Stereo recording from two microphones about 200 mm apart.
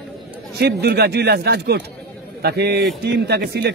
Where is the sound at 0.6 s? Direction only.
55° right (ahead or behind).